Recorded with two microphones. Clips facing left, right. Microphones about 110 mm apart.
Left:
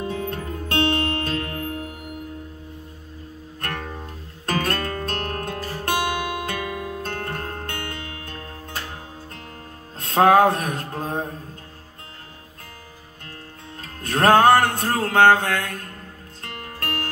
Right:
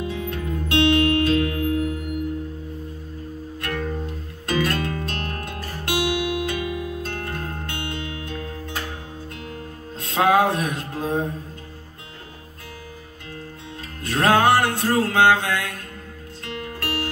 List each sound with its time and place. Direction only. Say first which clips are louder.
0.0 s music: even; 40° left (ahead or behind)
3.6 s music: right 3 dB; 45° left (ahead or behind)
9.9 s music: left 3 dB; 45° left (ahead or behind)
14.0 s music: left 3 dB; 40° left (ahead or behind)